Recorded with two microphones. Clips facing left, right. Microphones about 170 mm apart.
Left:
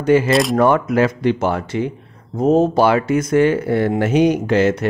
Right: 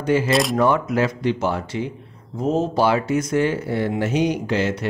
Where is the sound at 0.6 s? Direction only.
55° left (ahead or behind).